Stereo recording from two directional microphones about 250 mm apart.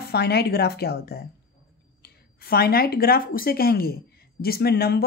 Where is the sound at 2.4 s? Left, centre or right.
Left.